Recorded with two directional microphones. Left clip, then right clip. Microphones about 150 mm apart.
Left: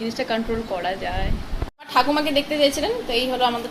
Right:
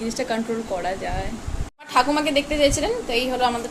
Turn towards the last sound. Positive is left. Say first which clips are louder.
# left 1 dB
turn(degrees=-10)  # may be behind; listen again after turning